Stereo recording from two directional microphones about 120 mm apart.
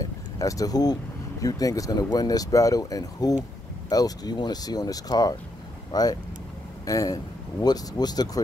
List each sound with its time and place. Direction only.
0.0 s vehicle: 30° left (ahead or behind)
1.4 s speech: 30° left (ahead or behind)